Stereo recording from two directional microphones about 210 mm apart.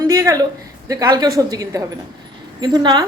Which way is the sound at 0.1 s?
15° right (ahead or behind).